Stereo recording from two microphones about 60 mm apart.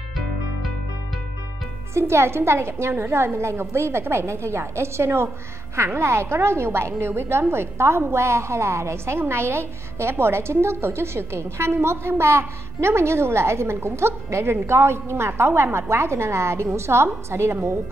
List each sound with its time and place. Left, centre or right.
2.0 s a woman's voice: right